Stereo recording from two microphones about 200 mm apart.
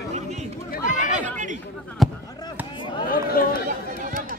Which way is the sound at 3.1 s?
45° left (ahead or behind).